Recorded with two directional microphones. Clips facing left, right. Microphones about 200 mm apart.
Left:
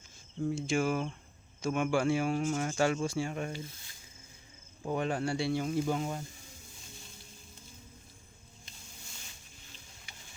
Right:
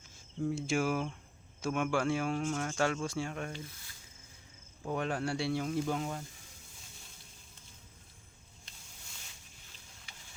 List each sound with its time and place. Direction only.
0.3 s speech: centre (ahead or behind)
3.6 s speech: 25° left (ahead or behind)
4.8 s speech: 5° left (ahead or behind)